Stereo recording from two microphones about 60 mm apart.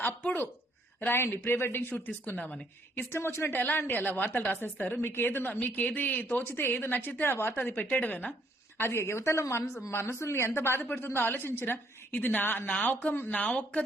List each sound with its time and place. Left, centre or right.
0.0 s a woman's voice: left
1.1 s speech: left
3.0 s speech: left
3.6 s a woman's voice: left
5.0 s speech: left
5.6 s speech: left
7.9 s a woman's voice: left
8.8 s speech: left
12.8 s a woman's voice: left